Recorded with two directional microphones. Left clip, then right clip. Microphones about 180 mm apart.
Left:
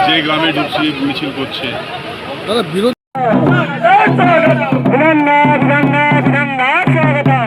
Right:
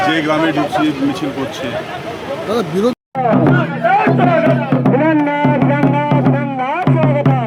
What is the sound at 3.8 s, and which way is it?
Music, 35° left (ahead or behind).